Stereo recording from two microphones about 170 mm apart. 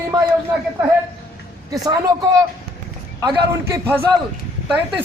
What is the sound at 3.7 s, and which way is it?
Speech, 15° right (ahead or behind).